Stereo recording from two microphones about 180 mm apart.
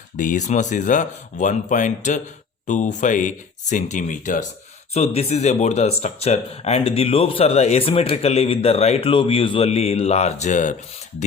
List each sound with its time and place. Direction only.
0.2 s speech: 45° left (ahead or behind)